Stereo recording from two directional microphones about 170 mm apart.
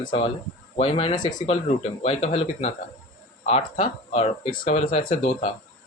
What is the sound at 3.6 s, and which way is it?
Speech, 55° left (ahead or behind).